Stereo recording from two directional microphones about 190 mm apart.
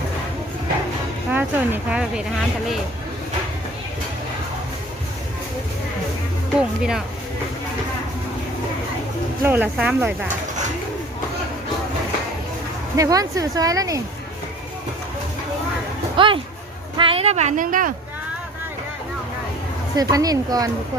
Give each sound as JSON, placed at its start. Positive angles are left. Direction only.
{"t": 1.3, "sound": "speech", "side_deg": -10}
{"t": 6.6, "sound": "speech", "side_deg": -5}
{"t": 9.4, "sound": "speech", "side_deg": -10}
{"t": 13.0, "sound": "speech", "side_deg": -20}
{"t": 16.1, "sound": "speech", "side_deg": -25}
{"t": 20.0, "sound": "speech", "side_deg": -20}